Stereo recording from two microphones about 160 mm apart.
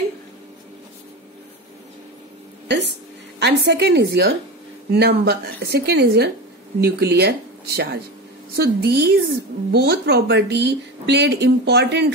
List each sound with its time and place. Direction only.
3.3 s a woman's voice: 90° right